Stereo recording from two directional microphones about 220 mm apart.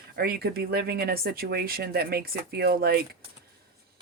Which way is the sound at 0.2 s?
45° right (ahead or behind).